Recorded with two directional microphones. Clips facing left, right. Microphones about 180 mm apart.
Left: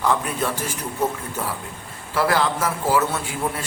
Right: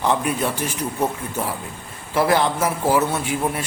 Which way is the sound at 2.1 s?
20° right (ahead or behind).